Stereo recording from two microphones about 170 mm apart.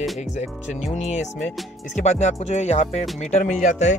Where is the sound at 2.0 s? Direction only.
40° left (ahead or behind).